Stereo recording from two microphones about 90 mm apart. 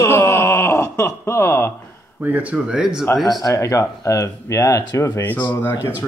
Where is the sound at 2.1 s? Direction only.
20° right (ahead or behind).